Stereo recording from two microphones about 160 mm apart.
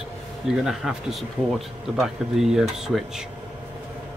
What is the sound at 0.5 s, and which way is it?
Speech, 5° right (ahead or behind).